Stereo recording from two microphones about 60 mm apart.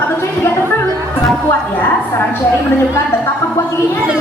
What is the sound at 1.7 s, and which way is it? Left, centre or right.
Speech, left.